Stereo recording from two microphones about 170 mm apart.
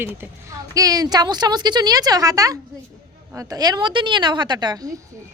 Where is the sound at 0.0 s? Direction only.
15° right (ahead or behind).